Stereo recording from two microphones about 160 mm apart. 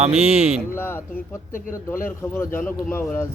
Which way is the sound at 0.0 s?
40° right (ahead or behind).